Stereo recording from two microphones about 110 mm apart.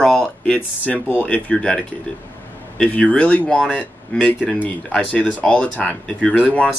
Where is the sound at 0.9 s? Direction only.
15° right (ahead or behind).